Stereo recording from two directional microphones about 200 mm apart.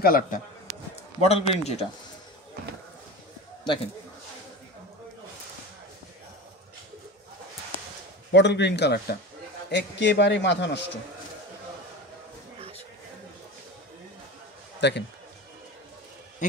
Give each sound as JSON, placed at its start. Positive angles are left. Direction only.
{"t": 0.0, "sound": "speech", "side_deg": 45}
{"t": 1.2, "sound": "speech", "side_deg": 30}
{"t": 3.6, "sound": "a man's voice", "side_deg": 25}
{"t": 8.3, "sound": "a man's voice", "side_deg": 60}
{"t": 14.8, "sound": "speech", "side_deg": 60}